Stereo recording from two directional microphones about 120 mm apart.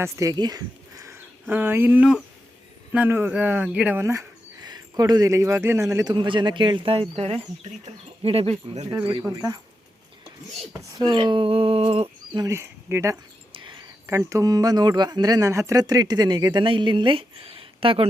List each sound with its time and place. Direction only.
0.0 s a man's voice: 30° right (ahead or behind); by 4.0 s 10° right (ahead or behind)
4.0 s speech: 25° right (ahead or behind)
4.6 s a man's voice: 35° right (ahead or behind)
6.1 s speech: 45° right (ahead or behind); by 8.9 s 60° right (ahead or behind)
10.8 s speech: 35° right (ahead or behind); by 12.0 s 55° right (ahead or behind)
12.5 s speech: 20° right (ahead or behind)
13.5 s a sound: 45° right (ahead or behind)
14.1 s speech: 25° right (ahead or behind); by 18.1 s 50° right (ahead or behind)